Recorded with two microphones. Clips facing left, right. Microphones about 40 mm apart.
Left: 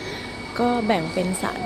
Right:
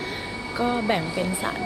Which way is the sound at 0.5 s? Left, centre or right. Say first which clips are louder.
Left 3 dB; centre.